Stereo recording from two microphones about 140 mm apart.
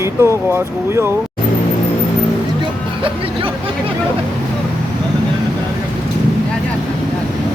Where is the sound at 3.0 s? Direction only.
40° right (ahead or behind).